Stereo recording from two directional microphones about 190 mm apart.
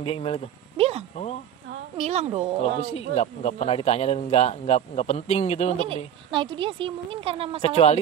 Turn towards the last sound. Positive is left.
turn(degrees=35)  # may be behind; listen again after turning